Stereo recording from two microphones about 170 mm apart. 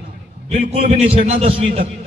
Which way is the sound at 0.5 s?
35° right (ahead or behind).